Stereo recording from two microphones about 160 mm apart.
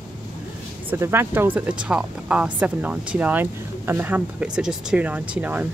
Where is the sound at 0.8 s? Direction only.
15° right (ahead or behind).